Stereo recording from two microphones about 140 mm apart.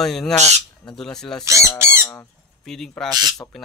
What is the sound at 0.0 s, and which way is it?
Speech, centre (ahead or behind).